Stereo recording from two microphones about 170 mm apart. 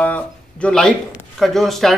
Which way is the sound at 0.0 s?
5° left (ahead or behind).